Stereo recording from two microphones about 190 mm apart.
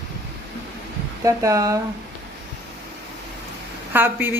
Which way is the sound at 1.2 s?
15° right (ahead or behind).